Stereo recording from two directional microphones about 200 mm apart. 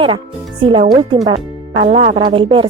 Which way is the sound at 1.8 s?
25° right (ahead or behind).